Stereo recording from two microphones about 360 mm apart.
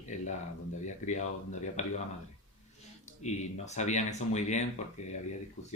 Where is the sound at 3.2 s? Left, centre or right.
Centre.